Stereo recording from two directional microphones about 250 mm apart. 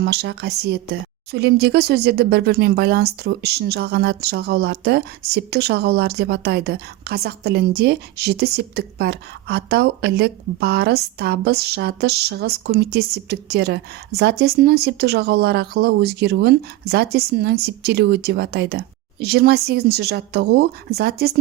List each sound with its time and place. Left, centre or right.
0.0 s speech: right